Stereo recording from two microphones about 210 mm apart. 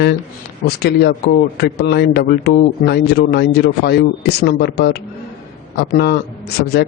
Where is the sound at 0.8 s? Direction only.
50° left (ahead or behind).